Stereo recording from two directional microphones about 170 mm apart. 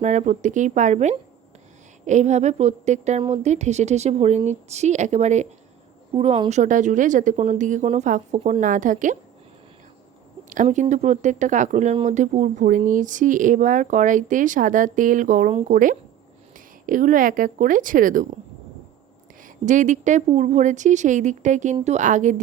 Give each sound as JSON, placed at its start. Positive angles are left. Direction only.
{"t": 0.0, "sound": "a woman's voice", "side_deg": -45}
{"t": 10.5, "sound": "speech", "side_deg": -45}
{"t": 19.6, "sound": "speech", "side_deg": -45}